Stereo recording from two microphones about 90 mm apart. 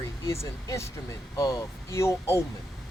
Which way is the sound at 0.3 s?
35° left (ahead or behind).